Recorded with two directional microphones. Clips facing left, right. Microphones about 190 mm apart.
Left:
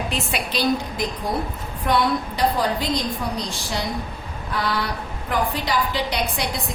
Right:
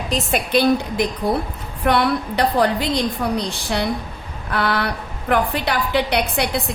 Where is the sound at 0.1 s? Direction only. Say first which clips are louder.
Right 7 dB; 50° right (ahead or behind).